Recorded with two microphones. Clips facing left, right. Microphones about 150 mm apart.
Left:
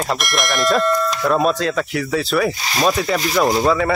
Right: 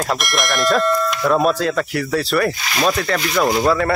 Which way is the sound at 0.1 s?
Centre (ahead or behind).